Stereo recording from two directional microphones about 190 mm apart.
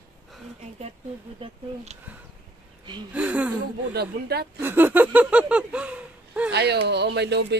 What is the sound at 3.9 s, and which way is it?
Speech, 60° right (ahead or behind).